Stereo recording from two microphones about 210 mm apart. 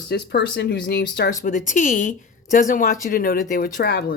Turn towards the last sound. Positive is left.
turn(degrees=50)  # may be behind; listen again after turning